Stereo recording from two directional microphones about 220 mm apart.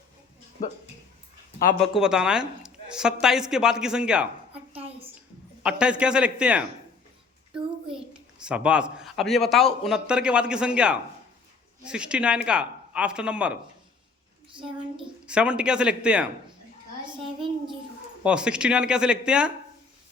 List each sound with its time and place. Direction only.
1.8 s a man's voice: centre (ahead or behind)
4.8 s a sound: 25° right (ahead or behind)
5.6 s a man's voice: 5° right (ahead or behind)
8.4 s a man's voice: 5° right (ahead or behind)
15.3 s a man's voice: 5° right (ahead or behind)
17.4 s child singing: 20° right (ahead or behind)
18.2 s a man's voice: 5° right (ahead or behind)